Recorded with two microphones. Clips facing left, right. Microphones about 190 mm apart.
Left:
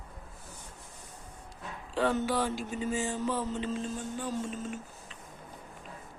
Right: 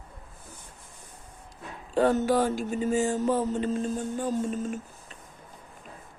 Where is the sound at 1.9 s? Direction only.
45° right (ahead or behind).